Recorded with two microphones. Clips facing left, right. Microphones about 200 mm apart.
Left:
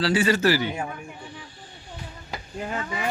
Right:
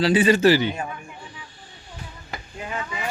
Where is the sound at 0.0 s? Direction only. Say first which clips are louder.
Right 4 dB; 20° right (ahead or behind).